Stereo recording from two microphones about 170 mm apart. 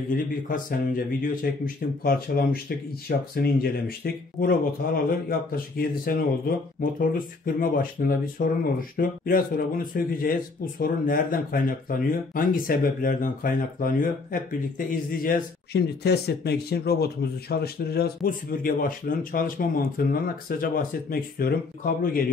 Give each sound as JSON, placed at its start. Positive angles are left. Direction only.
{"t": 0.1, "sound": "speech", "side_deg": 55}